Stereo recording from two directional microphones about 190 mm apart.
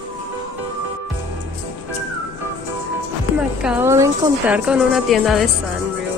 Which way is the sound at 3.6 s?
10° right (ahead or behind).